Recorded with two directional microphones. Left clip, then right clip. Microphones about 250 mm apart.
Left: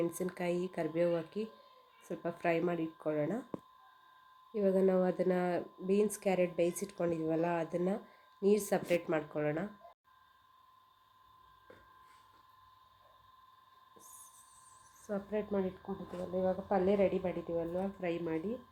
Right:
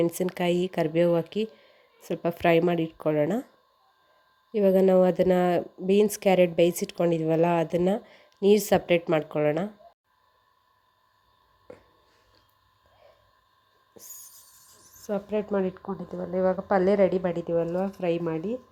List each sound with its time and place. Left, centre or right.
0.0 s speech: right
4.5 s speech: right
13.9 s a sound: right
14.9 s speech: right